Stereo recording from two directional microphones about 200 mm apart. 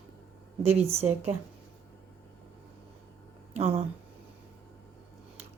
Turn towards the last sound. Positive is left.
turn(degrees=-30)  # may be behind; listen again after turning